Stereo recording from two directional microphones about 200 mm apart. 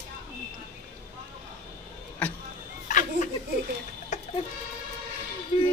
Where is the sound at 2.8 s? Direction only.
40° left (ahead or behind).